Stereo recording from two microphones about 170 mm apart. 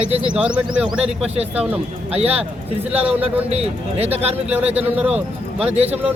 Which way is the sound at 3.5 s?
35° right (ahead or behind).